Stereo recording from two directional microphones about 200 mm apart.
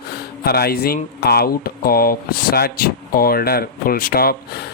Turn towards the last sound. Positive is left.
turn(degrees=50)  # may be behind; listen again after turning